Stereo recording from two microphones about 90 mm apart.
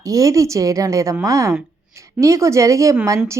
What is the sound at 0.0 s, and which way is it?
A woman's voice, 40° right (ahead or behind).